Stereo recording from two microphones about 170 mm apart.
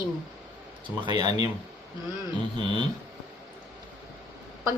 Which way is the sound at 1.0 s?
25° right (ahead or behind).